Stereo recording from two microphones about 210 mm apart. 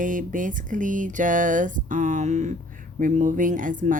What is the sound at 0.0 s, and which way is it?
Speech, 40° right (ahead or behind).